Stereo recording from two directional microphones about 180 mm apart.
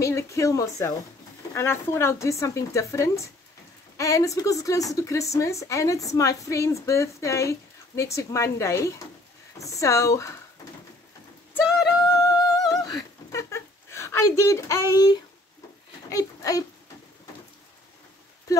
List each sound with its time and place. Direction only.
0.0 s a woman's voice: 15° left (ahead or behind)
12.1 s a sound: 20° left (ahead or behind)
16.1 s a child's voice: 20° left (ahead or behind)